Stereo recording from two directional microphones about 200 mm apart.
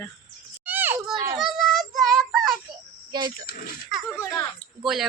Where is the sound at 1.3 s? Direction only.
Centre (ahead or behind).